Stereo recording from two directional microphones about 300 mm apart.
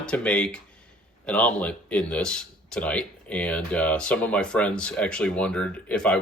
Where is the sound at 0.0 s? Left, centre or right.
Centre.